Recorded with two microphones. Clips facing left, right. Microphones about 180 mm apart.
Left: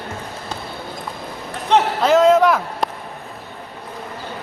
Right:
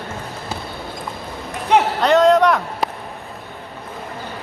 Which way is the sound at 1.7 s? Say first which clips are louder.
Even; 10° right (ahead or behind).